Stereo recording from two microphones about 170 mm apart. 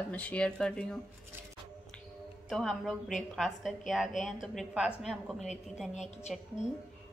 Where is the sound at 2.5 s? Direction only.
Centre (ahead or behind).